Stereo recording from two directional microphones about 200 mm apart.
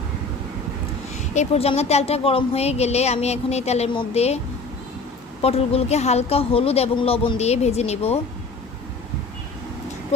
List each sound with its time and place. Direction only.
1.1 s speech: 35° left (ahead or behind)
5.4 s speech: 30° left (ahead or behind)